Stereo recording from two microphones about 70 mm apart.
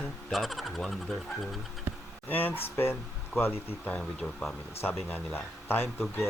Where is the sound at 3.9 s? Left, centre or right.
Centre.